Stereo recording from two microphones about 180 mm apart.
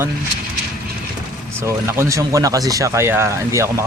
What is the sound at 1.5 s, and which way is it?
Speech, 15° right (ahead or behind).